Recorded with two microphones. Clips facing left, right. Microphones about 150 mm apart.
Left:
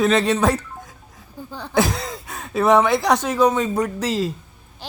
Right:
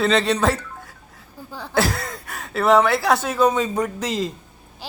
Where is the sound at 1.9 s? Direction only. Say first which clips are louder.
Left 1 dB; centre (ahead or behind).